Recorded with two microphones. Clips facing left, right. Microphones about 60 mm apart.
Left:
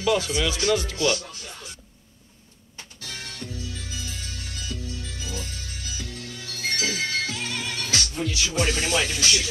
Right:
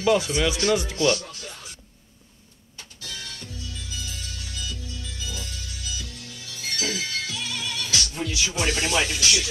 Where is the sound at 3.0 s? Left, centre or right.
Left.